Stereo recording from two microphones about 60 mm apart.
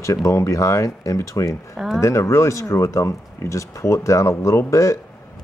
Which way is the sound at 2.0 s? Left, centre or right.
Left.